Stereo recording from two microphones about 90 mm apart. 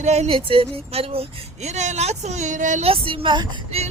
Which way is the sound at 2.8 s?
85° right.